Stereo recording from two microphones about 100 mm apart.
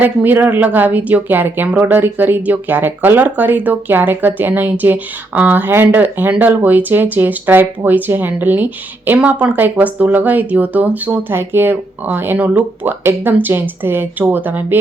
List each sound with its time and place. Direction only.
0.0 s speech: 20° right (ahead or behind)